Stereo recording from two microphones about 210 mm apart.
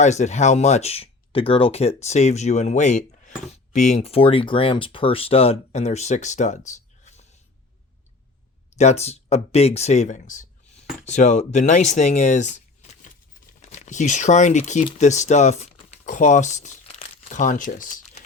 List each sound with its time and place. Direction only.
0.0 s speech: 35° left (ahead or behind)
6.7 s a sound: 35° left (ahead or behind)
8.8 s speech: 30° left (ahead or behind)